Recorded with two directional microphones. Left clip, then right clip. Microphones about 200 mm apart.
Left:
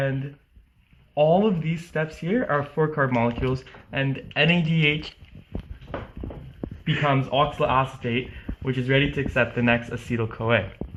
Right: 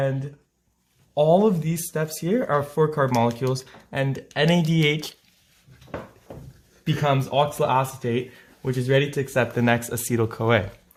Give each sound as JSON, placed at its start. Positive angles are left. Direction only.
{"t": 1.1, "sound": "speech", "side_deg": -40}
{"t": 7.0, "sound": "speech", "side_deg": -40}